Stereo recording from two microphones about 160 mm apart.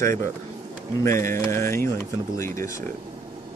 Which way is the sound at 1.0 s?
15° left (ahead or behind).